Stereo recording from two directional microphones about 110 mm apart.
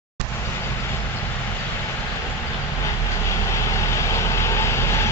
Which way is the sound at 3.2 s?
25° left (ahead or behind).